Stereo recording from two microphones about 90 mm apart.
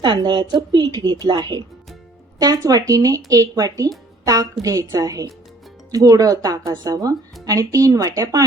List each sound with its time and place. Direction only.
0.0 s a woman's voice: 50° right (ahead or behind)